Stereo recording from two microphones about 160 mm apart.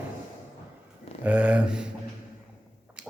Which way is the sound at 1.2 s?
10° right (ahead or behind).